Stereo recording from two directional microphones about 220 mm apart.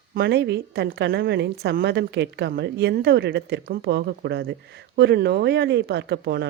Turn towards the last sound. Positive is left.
turn(degrees=-50)  # may be behind; listen again after turning